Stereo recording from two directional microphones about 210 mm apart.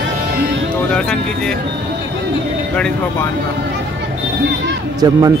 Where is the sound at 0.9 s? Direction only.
5° left (ahead or behind).